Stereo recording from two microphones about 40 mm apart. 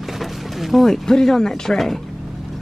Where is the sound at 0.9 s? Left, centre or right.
Centre.